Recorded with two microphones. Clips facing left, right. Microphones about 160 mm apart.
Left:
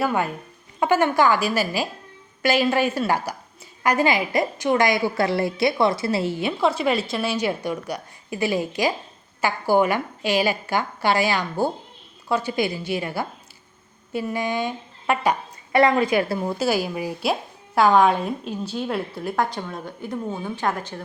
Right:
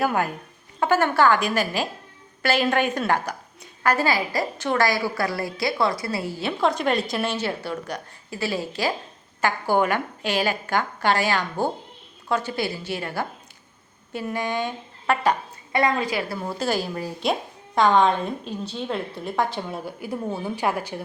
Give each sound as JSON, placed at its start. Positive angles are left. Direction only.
{"t": 0.0, "sound": "a woman's voice", "side_deg": 0}
{"t": 0.8, "sound": "a woman's voice", "side_deg": 15}
{"t": 6.4, "sound": "a woman's voice", "side_deg": 5}
{"t": 16.6, "sound": "a woman's voice", "side_deg": 10}